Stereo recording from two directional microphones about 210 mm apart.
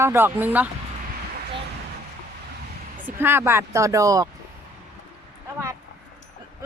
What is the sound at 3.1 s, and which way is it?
Speech, 10° right (ahead or behind).